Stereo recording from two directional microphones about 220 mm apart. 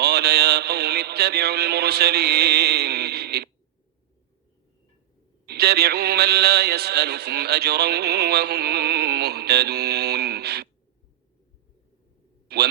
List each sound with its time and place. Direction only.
0.0 s a sound: 45° right (ahead or behind)
5.5 s a man's voice: 45° right (ahead or behind)
12.5 s speech: 45° right (ahead or behind)